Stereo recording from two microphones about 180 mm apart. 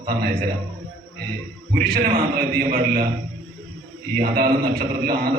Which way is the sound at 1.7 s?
50° right (ahead or behind).